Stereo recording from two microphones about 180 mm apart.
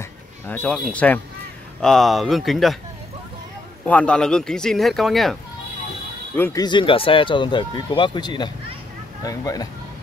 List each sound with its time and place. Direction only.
0.5 s speech: 10° left (ahead or behind)
3.8 s speech: 5° left (ahead or behind)
6.3 s speech: 10° left (ahead or behind)
6.6 s speech: 25° left (ahead or behind)